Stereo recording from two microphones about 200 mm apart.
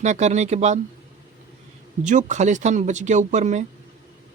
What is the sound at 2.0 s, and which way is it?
Speech, 35° right (ahead or behind).